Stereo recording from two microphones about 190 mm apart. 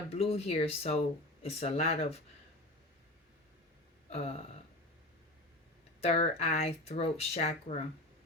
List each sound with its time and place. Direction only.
0.1 s speech: 30° left (ahead or behind)
4.1 s speech: 35° left (ahead or behind)
6.0 s speech: 35° left (ahead or behind)